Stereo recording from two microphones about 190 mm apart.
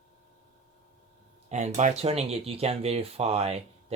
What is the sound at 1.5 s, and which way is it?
Speech, 35° right (ahead or behind).